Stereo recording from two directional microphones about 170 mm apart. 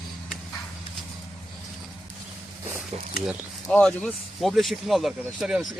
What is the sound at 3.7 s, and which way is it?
Speech, 5° left (ahead or behind).